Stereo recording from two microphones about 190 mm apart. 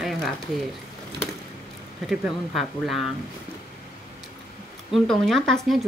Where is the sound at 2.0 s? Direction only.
Centre (ahead or behind).